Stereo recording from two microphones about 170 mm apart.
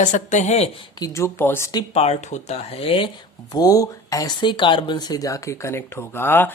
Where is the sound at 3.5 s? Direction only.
20° left (ahead or behind).